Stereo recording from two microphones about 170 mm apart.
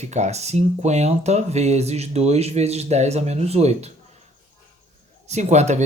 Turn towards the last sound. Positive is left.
turn(degrees=-40)  # may be behind; listen again after turning